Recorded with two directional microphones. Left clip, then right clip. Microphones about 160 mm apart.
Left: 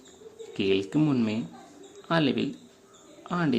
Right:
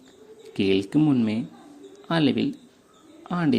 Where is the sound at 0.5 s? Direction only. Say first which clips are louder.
Right 3 dB; 35° right (ahead or behind).